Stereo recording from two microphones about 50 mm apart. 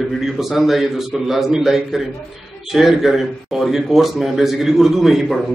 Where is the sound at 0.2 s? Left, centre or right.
Centre.